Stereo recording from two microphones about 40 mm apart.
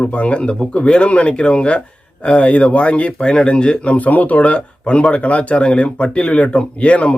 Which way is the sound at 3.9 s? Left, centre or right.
Left.